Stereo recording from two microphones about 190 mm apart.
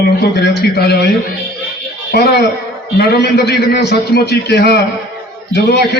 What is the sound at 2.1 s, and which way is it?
A man's voice, 55° left (ahead or behind).